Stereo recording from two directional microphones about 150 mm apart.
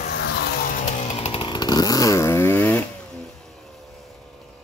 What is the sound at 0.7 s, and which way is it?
Chainsaw, 50° left (ahead or behind).